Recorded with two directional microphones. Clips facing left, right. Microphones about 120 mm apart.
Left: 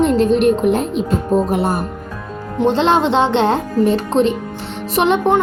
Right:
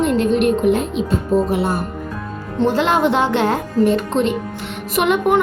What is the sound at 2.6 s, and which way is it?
Speech, 25° left (ahead or behind).